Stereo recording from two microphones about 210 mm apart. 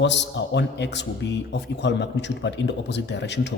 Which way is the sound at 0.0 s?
60° left (ahead or behind).